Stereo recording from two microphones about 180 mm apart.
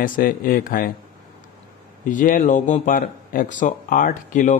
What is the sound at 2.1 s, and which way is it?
Speech, 45° left (ahead or behind).